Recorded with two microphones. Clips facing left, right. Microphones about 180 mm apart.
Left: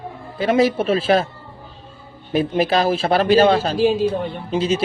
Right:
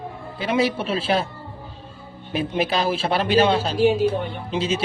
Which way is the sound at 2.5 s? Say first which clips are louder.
Left 3 dB; 40° left (ahead or behind).